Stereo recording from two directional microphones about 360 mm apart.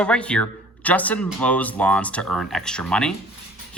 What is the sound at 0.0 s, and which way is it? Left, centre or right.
Speech, centre.